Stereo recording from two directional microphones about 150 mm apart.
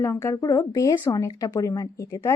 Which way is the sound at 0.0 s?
20° left (ahead or behind).